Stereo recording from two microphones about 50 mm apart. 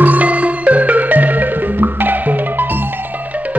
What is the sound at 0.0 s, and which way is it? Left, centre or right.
Music, right.